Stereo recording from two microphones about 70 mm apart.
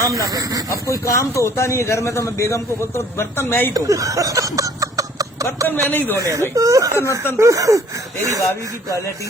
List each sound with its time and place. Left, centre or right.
0.3 s speech: right
0.7 s speech: left
3.8 s a sound: right
5.6 s speech: left
6.1 s speech: right